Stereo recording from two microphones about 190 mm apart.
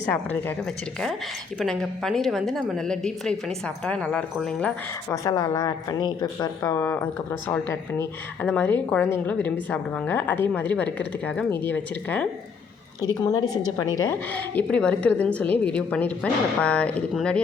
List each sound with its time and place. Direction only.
0.0 s a woman's voice: 10° left (ahead or behind)
1.5 s a woman's voice: centre (ahead or behind)
13.0 s a woman's voice: 20° left (ahead or behind)